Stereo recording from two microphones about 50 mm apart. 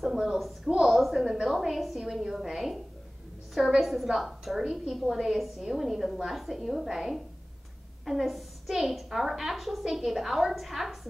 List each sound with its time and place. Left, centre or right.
0.0 s a sound: centre
0.7 s a woman's voice: centre
3.8 s a woman's voice: centre